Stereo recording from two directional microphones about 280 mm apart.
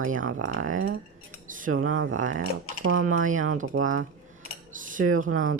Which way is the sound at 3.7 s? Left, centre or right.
Right.